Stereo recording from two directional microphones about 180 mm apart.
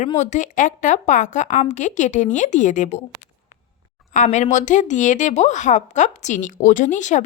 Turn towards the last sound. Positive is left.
turn(degrees=45)  # may be behind; listen again after turning